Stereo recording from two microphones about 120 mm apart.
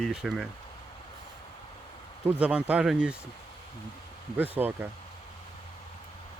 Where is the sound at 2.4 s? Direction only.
10° right (ahead or behind).